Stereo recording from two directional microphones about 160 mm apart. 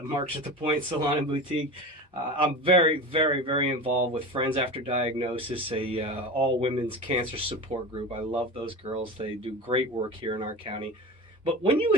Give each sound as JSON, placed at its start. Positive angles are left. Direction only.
{"t": 0.1, "sound": "speech", "side_deg": -30}
{"t": 2.4, "sound": "speech", "side_deg": -35}